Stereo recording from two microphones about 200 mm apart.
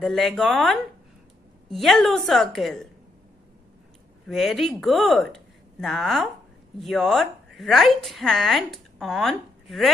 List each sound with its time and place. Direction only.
0.0 s a woman's voice: centre (ahead or behind)
4.3 s a woman's voice: centre (ahead or behind)